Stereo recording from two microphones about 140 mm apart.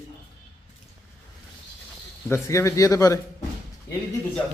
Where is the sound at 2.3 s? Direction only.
20° left (ahead or behind).